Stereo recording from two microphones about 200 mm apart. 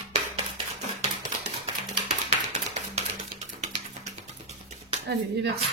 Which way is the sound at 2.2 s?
35° right (ahead or behind).